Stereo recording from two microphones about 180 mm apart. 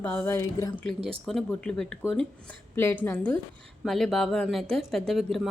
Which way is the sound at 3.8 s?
Centre (ahead or behind).